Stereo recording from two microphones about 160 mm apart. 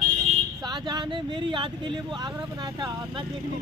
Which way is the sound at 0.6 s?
25° right (ahead or behind).